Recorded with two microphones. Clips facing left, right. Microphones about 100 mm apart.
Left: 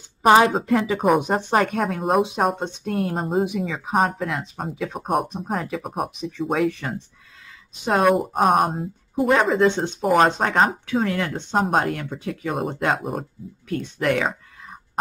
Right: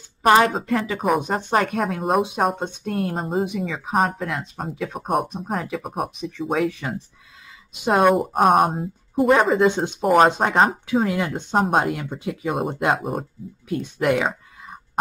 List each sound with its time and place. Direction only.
0.5 s speech: centre (ahead or behind)
13.7 s speech: 15° right (ahead or behind)
14.0 s a sound: 5° right (ahead or behind)